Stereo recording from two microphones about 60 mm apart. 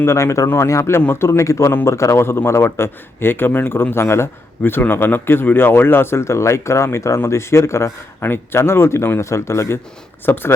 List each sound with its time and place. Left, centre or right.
0.0 s a man's voice: left
0.4 s a man's voice: left
10.2 s a man's voice: left